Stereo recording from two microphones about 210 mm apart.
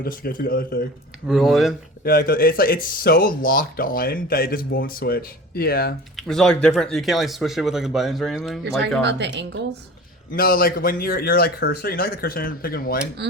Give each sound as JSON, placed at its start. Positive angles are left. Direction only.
{"t": 0.0, "sound": "speech", "side_deg": 45}
{"t": 1.3, "sound": "speech", "side_deg": 0}
{"t": 2.0, "sound": "speech", "side_deg": 45}
{"t": 6.1, "sound": "speech", "side_deg": 0}
{"t": 9.0, "sound": "speech", "side_deg": -55}
{"t": 10.3, "sound": "speech", "side_deg": 45}